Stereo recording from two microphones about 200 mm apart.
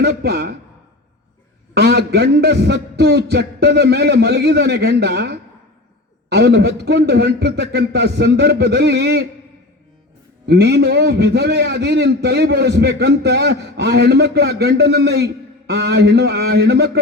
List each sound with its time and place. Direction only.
0.0 s a man's voice: 50° right (ahead or behind)
1.7 s a man's voice: 55° right (ahead or behind)
10.4 s a man's voice: 55° right (ahead or behind)